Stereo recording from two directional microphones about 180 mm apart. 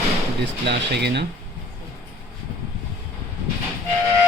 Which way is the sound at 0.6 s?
70° right (ahead or behind).